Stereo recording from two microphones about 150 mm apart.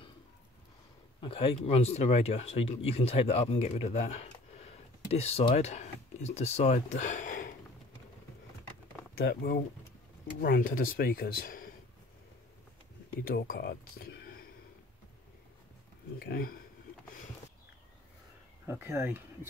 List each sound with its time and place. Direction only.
1.2 s speech: 40° left (ahead or behind); by 7.5 s 60° left (ahead or behind)
9.1 s speech: 85° left
13.3 s speech: 90° left
16.2 s speech: 85° left
18.7 s speech: 15° right (ahead or behind)